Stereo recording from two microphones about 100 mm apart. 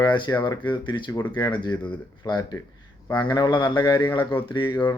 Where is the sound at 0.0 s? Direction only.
50° left (ahead or behind).